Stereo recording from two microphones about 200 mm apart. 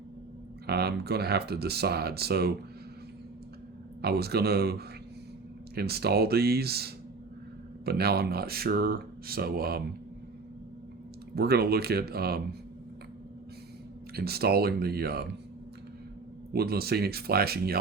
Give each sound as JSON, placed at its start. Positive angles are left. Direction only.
{"t": 0.7, "sound": "speech", "side_deg": -55}
{"t": 4.0, "sound": "speech", "side_deg": -55}
{"t": 11.3, "sound": "speech", "side_deg": -50}
{"t": 14.2, "sound": "speech", "side_deg": -50}
{"t": 16.5, "sound": "speech", "side_deg": -50}